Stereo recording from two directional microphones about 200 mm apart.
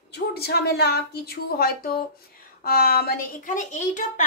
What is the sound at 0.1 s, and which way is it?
A woman's voice, 50° left (ahead or behind).